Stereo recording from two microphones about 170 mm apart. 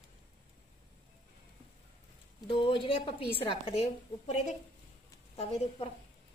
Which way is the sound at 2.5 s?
30° left (ahead or behind).